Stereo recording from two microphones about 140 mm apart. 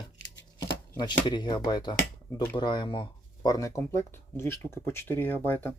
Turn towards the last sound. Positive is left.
turn(degrees=15)  # may be behind; listen again after turning